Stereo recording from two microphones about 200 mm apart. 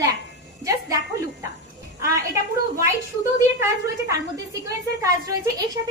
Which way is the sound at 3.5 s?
15° right (ahead or behind).